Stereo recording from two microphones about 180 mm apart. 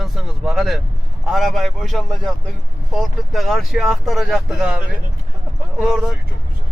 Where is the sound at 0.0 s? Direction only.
Centre (ahead or behind).